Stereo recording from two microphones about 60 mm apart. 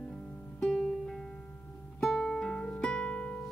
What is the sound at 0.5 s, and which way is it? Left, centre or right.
Music, centre.